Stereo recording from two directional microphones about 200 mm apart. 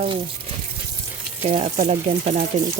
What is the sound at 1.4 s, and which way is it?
Speech, 30° right (ahead or behind).